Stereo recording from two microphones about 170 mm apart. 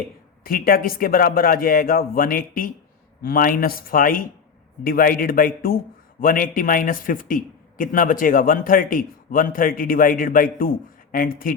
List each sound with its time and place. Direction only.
0.4 s a man's voice: 60° left (ahead or behind)